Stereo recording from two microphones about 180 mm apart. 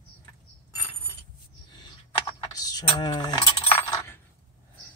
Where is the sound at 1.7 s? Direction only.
25° left (ahead or behind).